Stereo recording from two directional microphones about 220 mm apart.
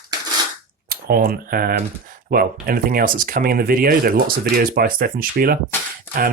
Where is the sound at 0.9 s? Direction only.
45° right (ahead or behind).